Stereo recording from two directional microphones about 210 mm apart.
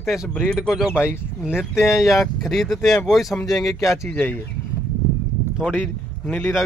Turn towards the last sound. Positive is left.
turn(degrees=10)  # may be behind; listen again after turning